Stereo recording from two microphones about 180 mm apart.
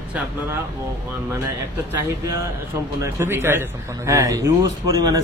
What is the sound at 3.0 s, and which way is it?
A man's voice, 15° right (ahead or behind).